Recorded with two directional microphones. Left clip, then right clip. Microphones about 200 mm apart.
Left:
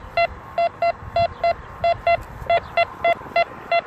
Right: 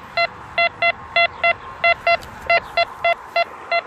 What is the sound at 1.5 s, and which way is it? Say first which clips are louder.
Telephone dialing: right 3 dB; 25° left (ahead or behind).